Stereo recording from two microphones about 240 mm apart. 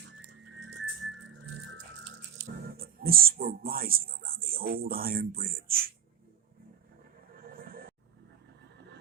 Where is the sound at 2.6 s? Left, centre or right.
Right.